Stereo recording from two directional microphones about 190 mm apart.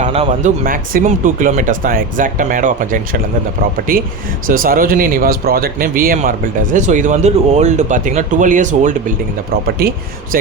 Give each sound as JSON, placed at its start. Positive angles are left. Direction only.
{"t": 0.0, "sound": "speech", "side_deg": -35}
{"t": 9.8, "sound": "speech", "side_deg": -55}